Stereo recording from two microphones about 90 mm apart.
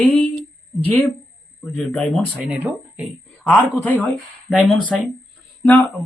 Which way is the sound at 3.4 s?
20° left (ahead or behind).